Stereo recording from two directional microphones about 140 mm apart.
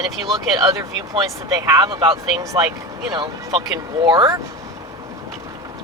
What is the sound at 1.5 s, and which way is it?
Speech, 25° right (ahead or behind).